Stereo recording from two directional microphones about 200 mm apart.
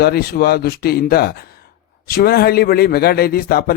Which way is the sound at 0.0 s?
50° left (ahead or behind).